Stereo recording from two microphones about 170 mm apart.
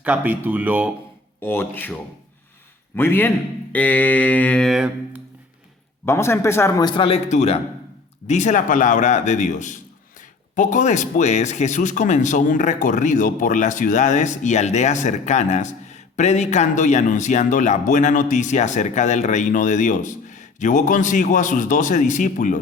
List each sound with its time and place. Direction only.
0.0 s speech: 10° right (ahead or behind)
1.4 s a man's voice: 15° left (ahead or behind)
6.1 s a man's voice: 15° left (ahead or behind)
7.3 s a man's voice: 40° left (ahead or behind)